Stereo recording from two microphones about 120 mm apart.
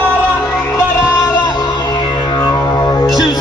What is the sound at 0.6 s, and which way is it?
Music, 20° left (ahead or behind).